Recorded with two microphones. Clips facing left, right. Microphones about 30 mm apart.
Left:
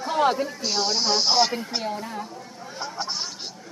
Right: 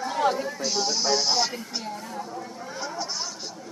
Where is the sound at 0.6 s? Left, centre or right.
Left.